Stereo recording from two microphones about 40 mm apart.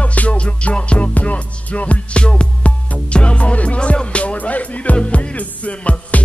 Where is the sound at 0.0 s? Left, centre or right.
Left.